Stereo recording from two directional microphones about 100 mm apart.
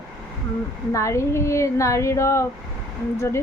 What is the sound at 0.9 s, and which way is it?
A woman's voice, 30° left (ahead or behind).